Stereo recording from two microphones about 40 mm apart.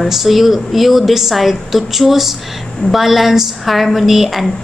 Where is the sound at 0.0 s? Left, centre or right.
Centre.